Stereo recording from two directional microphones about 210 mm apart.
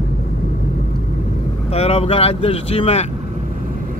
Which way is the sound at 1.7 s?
30° left (ahead or behind).